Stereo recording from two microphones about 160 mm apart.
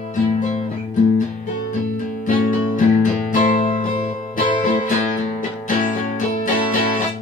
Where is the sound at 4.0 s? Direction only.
50° left (ahead or behind).